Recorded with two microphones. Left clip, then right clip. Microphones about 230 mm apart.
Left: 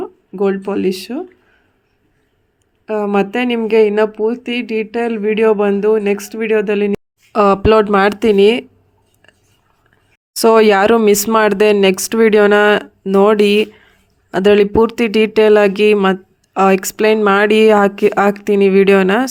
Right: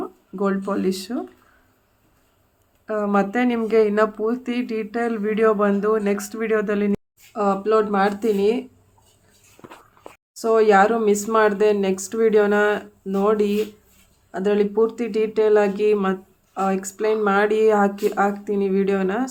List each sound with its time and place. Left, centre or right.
0.0 s speech: centre
2.8 s speech: centre
7.3 s speech: left
10.3 s speech: left